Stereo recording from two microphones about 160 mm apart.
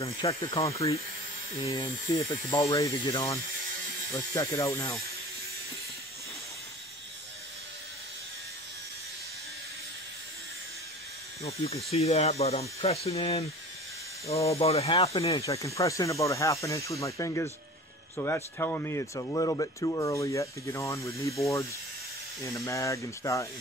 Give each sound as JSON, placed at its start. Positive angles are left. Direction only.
{"t": 0.0, "sound": "speech", "side_deg": 35}
{"t": 2.8, "sound": "speech", "side_deg": 20}
{"t": 11.4, "sound": "speech", "side_deg": 40}
{"t": 15.4, "sound": "speech", "side_deg": 20}